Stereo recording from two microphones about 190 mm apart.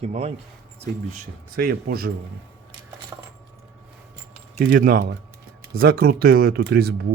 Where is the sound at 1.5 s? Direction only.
50° right (ahead or behind).